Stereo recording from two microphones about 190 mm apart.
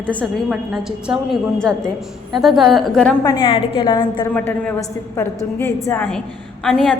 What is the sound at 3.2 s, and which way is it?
A woman's voice, 25° left (ahead or behind).